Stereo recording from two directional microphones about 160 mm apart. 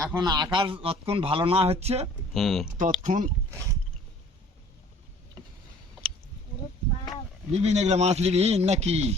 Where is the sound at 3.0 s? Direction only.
50° right (ahead or behind).